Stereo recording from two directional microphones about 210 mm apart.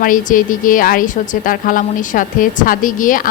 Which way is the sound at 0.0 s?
40° left (ahead or behind).